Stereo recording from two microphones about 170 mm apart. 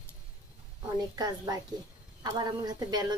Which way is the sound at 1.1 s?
25° right (ahead or behind).